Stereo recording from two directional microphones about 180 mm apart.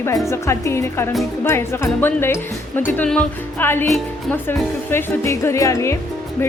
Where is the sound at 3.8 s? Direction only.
Centre (ahead or behind).